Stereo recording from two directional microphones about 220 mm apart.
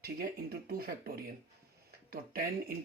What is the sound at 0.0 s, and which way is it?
Speech, 45° right (ahead or behind).